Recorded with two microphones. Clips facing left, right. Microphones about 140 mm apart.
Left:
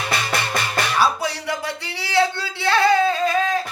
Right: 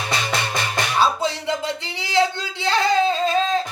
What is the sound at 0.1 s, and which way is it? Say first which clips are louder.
Music: left 1 dB; 20° right (ahead or behind).